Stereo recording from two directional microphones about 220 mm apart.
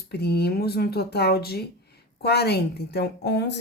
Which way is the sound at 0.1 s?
50° left (ahead or behind).